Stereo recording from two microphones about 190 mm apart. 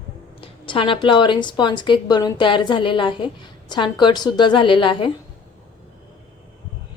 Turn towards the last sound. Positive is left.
turn(degrees=25)  # may be behind; listen again after turning